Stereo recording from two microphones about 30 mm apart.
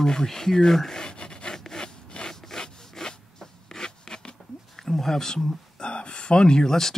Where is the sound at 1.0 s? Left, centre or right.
Left.